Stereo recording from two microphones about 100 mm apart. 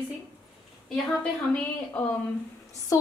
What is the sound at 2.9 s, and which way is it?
Speech, 30° left (ahead or behind).